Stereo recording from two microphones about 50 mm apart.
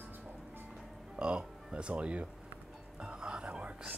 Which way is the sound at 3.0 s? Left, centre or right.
Centre.